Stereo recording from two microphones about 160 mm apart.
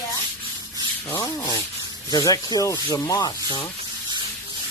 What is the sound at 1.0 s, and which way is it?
Sanding, 20° left (ahead or behind).